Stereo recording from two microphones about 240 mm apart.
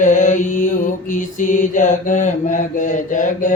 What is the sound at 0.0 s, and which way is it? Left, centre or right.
Mantra, left.